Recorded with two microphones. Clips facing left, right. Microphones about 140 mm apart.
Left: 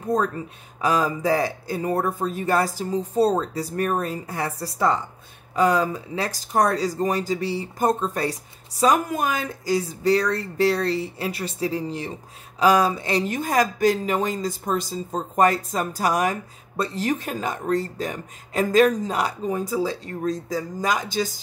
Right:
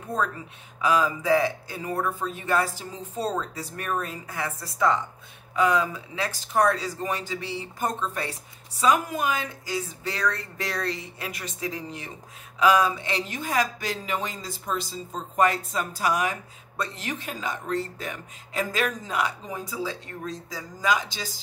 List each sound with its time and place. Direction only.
0.1 s a woman's voice: 40° left (ahead or behind)
19.5 s speech: 45° left (ahead or behind)